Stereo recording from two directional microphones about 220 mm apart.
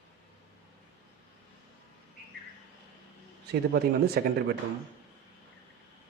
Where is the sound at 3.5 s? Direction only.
45° right (ahead or behind).